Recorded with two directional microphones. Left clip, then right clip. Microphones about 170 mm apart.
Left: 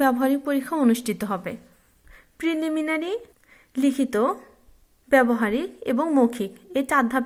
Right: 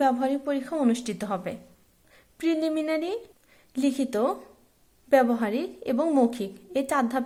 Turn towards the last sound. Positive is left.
turn(degrees=20)  # may be behind; listen again after turning